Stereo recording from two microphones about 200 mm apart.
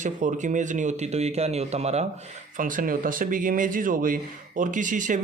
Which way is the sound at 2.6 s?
45° right (ahead or behind).